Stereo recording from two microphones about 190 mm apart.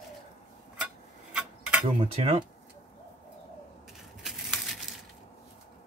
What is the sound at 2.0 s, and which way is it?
Speech, 30° right (ahead or behind).